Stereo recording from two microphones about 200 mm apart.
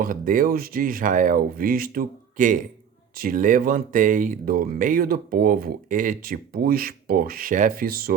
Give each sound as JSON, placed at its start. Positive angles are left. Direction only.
{"t": 0.0, "sound": "speech", "side_deg": -45}